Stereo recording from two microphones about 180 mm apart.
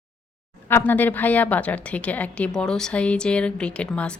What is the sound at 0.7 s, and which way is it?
A woman's voice, 10° left (ahead or behind).